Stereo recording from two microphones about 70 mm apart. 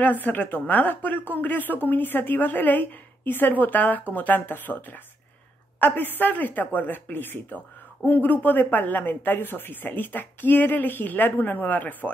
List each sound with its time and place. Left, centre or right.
0.0 s speech: left